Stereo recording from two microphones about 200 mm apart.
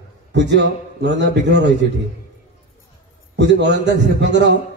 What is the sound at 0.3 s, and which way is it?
A man's voice, 60° right (ahead or behind).